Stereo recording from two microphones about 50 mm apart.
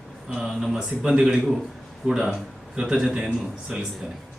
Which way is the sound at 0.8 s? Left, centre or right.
Centre.